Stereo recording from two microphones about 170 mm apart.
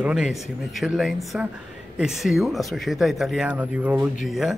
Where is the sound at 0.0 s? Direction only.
5° right (ahead or behind).